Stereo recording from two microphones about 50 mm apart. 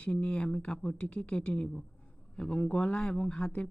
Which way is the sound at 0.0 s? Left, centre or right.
Left.